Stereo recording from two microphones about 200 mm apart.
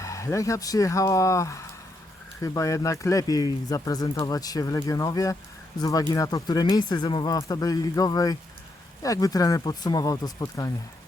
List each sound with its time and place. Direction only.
0.0 s speech: 15° left (ahead or behind)